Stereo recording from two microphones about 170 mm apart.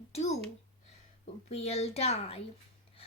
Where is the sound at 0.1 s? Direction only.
40° left (ahead or behind).